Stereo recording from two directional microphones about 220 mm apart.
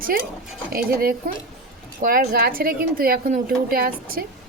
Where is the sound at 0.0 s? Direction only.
40° right (ahead or behind).